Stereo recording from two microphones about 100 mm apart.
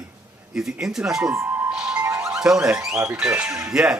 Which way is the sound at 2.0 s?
30° right (ahead or behind).